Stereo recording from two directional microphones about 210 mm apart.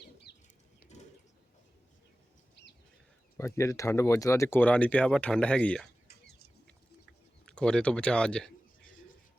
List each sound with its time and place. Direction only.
0.3 s a sound: 50° left (ahead or behind)
3.3 s speech: 15° left (ahead or behind)
7.4 s a man's voice: 5° left (ahead or behind)